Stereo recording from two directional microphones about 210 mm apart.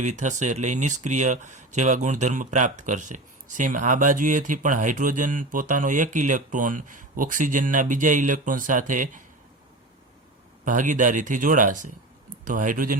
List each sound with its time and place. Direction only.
0.0 s speech: 35° right (ahead or behind)
10.7 s speech: 40° right (ahead or behind)